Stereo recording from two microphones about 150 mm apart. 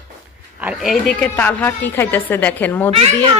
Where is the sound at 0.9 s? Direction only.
5° left (ahead or behind).